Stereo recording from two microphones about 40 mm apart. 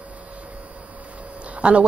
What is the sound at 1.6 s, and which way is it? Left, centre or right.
Speech, right.